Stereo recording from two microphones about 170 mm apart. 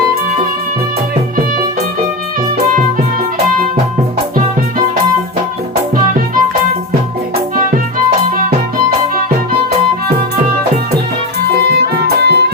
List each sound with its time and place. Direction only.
12.0 s music: 75° right (ahead or behind)